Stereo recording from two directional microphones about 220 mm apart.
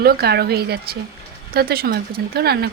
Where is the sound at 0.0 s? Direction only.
45° right (ahead or behind).